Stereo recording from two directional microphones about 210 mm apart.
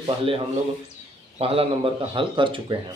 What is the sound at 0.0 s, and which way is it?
Speech, 25° right (ahead or behind).